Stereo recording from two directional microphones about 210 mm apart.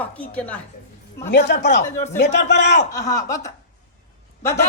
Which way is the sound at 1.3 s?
55° left (ahead or behind).